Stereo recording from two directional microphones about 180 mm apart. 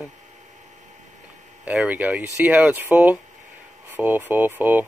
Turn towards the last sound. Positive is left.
turn(degrees=-10)  # may be behind; listen again after turning